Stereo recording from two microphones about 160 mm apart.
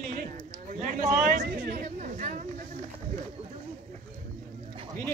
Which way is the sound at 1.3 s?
65° right (ahead or behind).